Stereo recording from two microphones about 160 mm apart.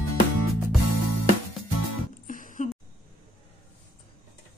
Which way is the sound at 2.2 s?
55° left (ahead or behind).